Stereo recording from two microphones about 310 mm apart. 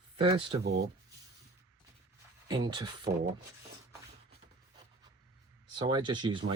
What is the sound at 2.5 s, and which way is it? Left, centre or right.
Speech, centre.